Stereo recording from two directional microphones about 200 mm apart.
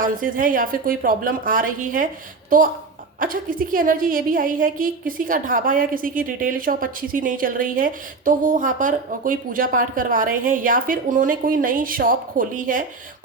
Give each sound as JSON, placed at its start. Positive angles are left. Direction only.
{"t": 0.0, "sound": "a woman's voice", "side_deg": -40}
{"t": 3.2, "sound": "a woman's voice", "side_deg": -45}